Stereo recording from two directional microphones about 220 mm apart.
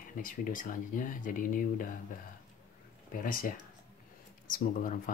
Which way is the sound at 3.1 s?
40° left (ahead or behind).